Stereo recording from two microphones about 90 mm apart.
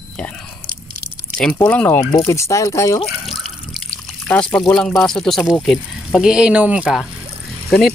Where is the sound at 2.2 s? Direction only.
35° left (ahead or behind).